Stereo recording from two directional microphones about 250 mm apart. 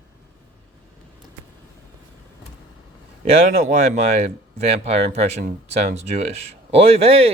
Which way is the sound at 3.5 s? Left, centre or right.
Right.